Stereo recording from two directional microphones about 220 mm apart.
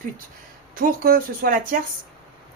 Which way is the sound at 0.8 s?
40° right (ahead or behind).